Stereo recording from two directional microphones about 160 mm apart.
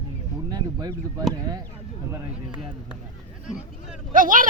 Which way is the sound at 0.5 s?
25° right (ahead or behind).